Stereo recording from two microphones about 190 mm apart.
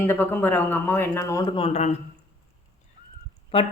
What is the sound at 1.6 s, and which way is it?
Speech, 35° left (ahead or behind).